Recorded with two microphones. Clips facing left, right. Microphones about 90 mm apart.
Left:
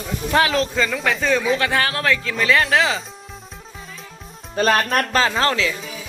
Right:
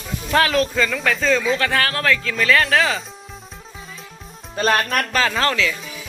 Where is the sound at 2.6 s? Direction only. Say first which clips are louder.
Even; 5° left (ahead or behind).